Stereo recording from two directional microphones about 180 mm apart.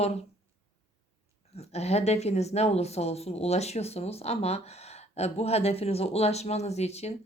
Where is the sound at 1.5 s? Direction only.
35° left (ahead or behind).